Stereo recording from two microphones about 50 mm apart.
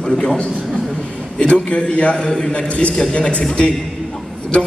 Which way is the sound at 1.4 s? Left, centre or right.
Left.